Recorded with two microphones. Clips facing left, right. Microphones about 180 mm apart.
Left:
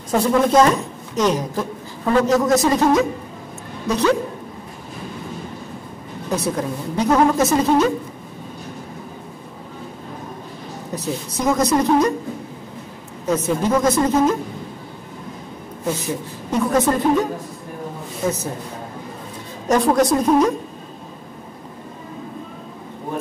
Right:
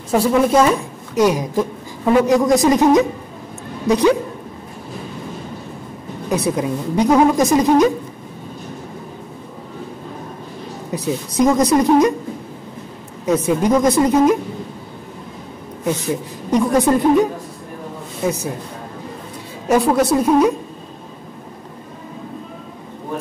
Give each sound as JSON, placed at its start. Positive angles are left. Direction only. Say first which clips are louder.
{"t": 0.1, "sound": "a woman's voice", "louder": "right 1 dB", "side_deg": -10}
{"t": 6.3, "sound": "a woman's voice", "louder": "right 3 dB", "side_deg": -15}
{"t": 10.9, "sound": "a woman's voice", "louder": "right 4 dB", "side_deg": -15}
{"t": 13.2, "sound": "a woman's voice", "louder": "right 3 dB", "side_deg": -10}
{"t": 16.4, "sound": "a woman's voice", "louder": "right 3 dB", "side_deg": -15}
{"t": 19.7, "sound": "a woman's voice", "louder": "right 1 dB", "side_deg": -10}